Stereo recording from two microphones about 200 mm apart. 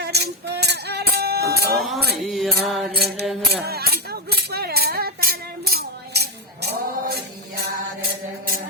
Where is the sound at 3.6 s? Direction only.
50° right (ahead or behind).